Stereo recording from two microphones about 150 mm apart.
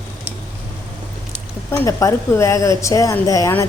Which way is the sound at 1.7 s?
20° left (ahead or behind).